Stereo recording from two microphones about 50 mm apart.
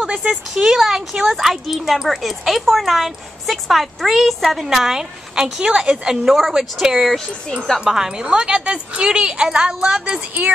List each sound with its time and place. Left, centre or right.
0.0 s speech: right
0.7 s speech: centre